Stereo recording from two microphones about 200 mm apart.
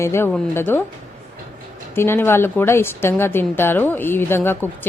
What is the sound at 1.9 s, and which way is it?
A woman's voice, 10° left (ahead or behind).